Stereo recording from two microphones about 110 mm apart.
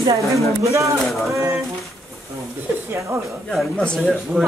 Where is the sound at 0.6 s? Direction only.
30° right (ahead or behind).